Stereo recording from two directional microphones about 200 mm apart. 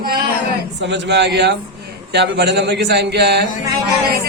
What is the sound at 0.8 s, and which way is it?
Speech, 60° right (ahead or behind).